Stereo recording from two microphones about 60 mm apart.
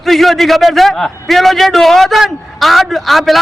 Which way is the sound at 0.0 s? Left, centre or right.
Centre.